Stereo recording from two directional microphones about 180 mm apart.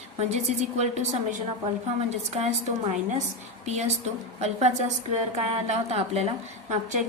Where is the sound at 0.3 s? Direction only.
40° right (ahead or behind).